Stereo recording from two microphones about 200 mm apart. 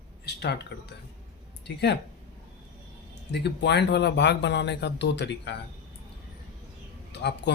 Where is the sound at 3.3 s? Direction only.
55° left (ahead or behind).